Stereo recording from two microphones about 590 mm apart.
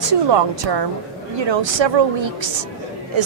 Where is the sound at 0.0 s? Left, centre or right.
Right.